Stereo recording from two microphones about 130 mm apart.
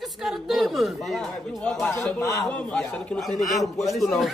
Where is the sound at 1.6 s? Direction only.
10° left (ahead or behind).